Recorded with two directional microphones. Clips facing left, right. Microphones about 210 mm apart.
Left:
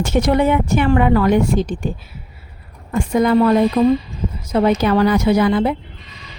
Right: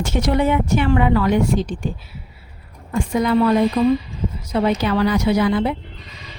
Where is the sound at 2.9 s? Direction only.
45° left (ahead or behind).